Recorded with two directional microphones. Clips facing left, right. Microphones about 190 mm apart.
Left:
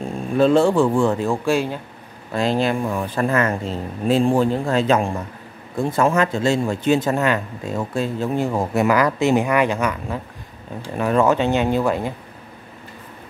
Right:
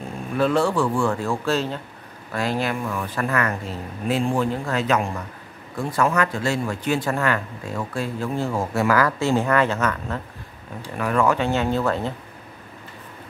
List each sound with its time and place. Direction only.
0.4 s speech: 25° left (ahead or behind)
2.3 s speech: 25° left (ahead or behind)
11.0 s speech: 25° left (ahead or behind)